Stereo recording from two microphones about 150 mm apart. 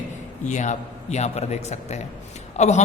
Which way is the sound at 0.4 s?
55° left (ahead or behind).